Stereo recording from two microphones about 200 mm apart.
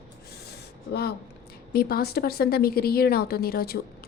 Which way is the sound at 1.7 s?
50° left (ahead or behind).